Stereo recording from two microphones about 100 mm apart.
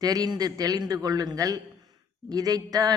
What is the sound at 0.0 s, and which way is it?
Speech, 40° right (ahead or behind).